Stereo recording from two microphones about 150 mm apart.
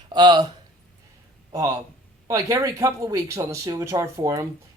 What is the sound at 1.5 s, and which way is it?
A man's voice, 20° right (ahead or behind).